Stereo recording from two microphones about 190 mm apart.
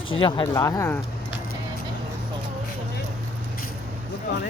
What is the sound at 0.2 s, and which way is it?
Speech, 25° left (ahead or behind).